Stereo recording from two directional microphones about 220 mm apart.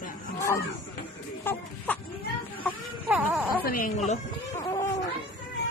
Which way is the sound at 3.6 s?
40° left (ahead or behind).